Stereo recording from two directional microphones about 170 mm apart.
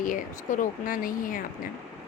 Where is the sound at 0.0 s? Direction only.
50° left (ahead or behind).